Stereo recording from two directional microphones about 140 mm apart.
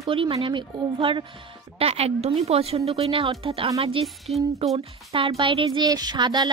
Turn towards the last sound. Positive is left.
turn(degrees=-30)  # may be behind; listen again after turning